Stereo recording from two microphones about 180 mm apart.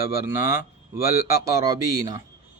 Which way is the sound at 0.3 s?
15° right (ahead or behind).